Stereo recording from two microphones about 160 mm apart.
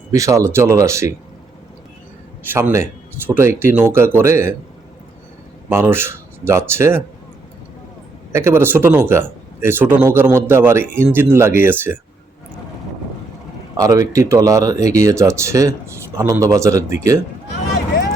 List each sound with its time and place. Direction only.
0.1 s speech: 20° right (ahead or behind)
2.4 s speech: 10° right (ahead or behind)
5.6 s speech: 10° right (ahead or behind)
8.3 s speech: 15° right (ahead or behind)
13.7 s speech: 20° right (ahead or behind)